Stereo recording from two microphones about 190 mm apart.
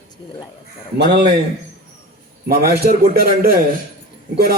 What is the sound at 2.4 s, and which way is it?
A man's voice, 50° right (ahead or behind).